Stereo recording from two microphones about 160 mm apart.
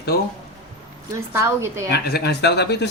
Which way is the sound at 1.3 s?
15° right (ahead or behind).